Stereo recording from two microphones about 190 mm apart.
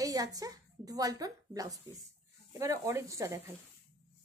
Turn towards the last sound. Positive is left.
turn(degrees=-15)  # may be behind; listen again after turning